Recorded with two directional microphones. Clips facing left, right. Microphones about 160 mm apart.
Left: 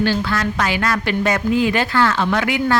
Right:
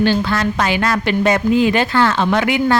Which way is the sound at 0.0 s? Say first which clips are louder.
Right 3 dB; 25° right (ahead or behind).